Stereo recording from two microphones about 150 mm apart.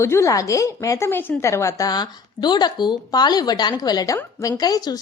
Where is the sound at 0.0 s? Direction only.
20° left (ahead or behind).